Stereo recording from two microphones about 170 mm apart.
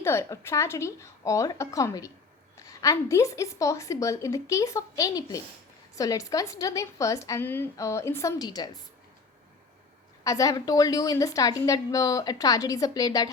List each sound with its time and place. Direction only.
0.0 s a woman's voice: 15° left (ahead or behind)
10.2 s a woman's voice: 20° left (ahead or behind)